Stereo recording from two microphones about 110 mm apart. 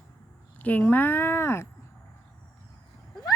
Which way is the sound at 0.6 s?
15° left (ahead or behind).